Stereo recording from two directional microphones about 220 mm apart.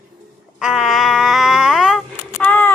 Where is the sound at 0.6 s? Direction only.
Centre (ahead or behind).